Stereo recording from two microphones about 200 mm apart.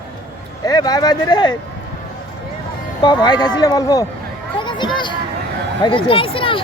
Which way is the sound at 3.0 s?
20° left (ahead or behind).